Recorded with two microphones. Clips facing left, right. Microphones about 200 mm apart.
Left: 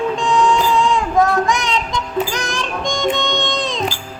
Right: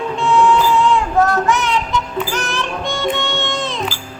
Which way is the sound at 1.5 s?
15° left (ahead or behind).